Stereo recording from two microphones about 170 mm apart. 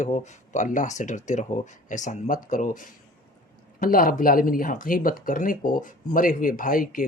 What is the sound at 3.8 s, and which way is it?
Speech, 55° left (ahead or behind).